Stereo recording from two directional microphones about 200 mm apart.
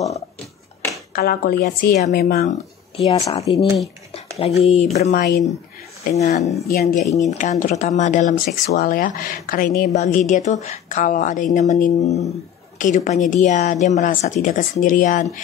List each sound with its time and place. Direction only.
1.1 s speech: 50° left (ahead or behind)
3.1 s speech: 15° left (ahead or behind)
3.3 s a woman's voice: 30° left (ahead or behind)
6.7 s a woman's voice: 45° left (ahead or behind)